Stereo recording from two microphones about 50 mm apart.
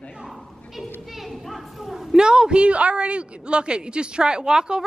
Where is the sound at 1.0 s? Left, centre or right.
Centre.